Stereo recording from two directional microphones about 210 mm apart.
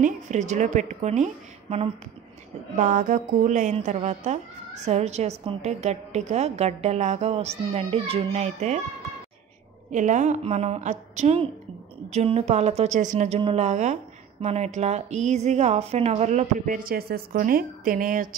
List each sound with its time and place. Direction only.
0.0 s a woman's voice: 35° right (ahead or behind)
9.9 s a woman's voice: 35° right (ahead or behind)